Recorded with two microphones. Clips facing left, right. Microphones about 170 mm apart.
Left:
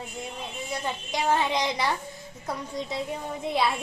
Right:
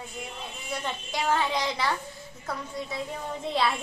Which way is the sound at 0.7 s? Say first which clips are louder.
Left 1 dB; 10° left (ahead or behind).